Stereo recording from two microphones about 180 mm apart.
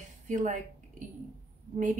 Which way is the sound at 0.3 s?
45° right (ahead or behind).